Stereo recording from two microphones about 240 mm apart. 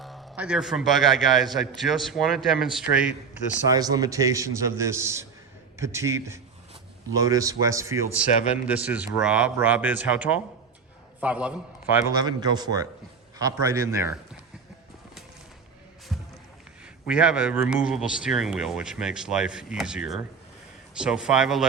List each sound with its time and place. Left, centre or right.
0.0 s a man's voice: centre
3.8 s a man's voice: centre
12.0 s a man's voice: centre
16.1 s a sound: centre
17.1 s a man's voice: centre